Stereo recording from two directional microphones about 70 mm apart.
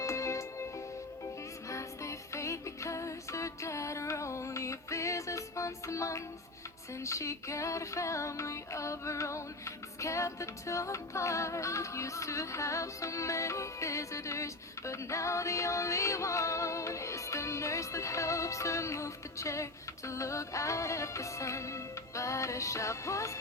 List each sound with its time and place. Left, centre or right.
0.0 s music: left
1.7 s music: left